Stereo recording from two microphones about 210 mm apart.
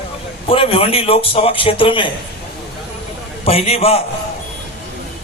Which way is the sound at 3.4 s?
30° left (ahead or behind).